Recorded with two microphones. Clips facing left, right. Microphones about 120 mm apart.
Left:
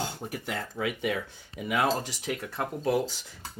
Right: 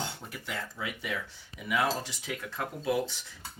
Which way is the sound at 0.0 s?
40° left (ahead or behind).